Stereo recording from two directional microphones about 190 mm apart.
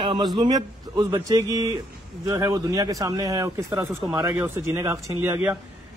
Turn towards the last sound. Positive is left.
turn(degrees=-15)  # may be behind; listen again after turning